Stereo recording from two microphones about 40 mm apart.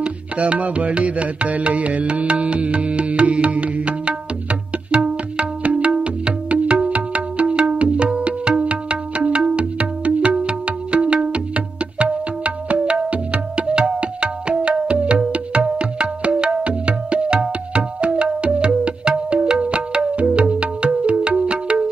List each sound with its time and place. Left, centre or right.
0.0 s music: right
13.1 s tabla: right
20.2 s music: right